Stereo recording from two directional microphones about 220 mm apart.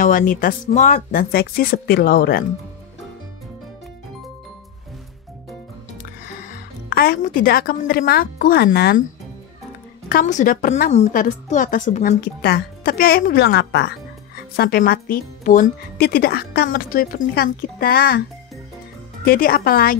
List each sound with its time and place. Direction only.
0.0 s a woman's voice: 40° left (ahead or behind)
6.9 s speech: 40° left (ahead or behind)
10.0 s a woman's voice: 35° left (ahead or behind)
19.2 s a woman's voice: 40° left (ahead or behind)